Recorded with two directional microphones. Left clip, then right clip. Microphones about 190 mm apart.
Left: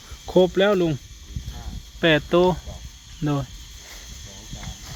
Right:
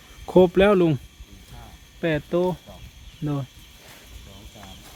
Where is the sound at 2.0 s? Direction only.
15° left (ahead or behind).